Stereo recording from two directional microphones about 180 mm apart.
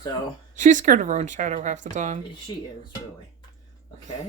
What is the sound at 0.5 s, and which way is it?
Speech, 45° right (ahead or behind).